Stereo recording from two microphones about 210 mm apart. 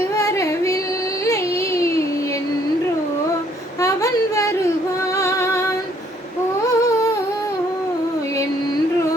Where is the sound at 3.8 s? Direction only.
15° left (ahead or behind).